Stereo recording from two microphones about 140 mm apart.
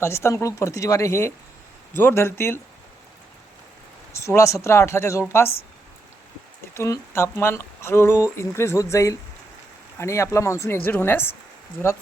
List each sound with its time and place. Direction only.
0.0 s speech: 20° left (ahead or behind)
4.1 s speech: 20° left (ahead or behind)
6.7 s speech: 20° left (ahead or behind)